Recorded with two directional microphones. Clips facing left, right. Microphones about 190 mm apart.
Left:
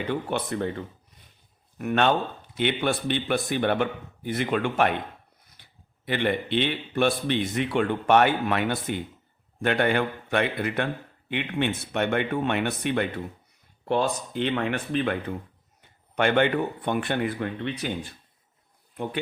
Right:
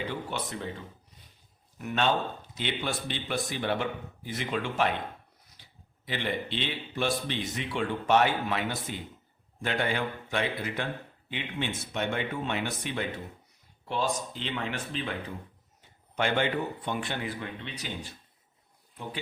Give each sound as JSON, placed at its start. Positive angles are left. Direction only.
{"t": 0.1, "sound": "speech", "side_deg": 60}
{"t": 6.1, "sound": "speech", "side_deg": 60}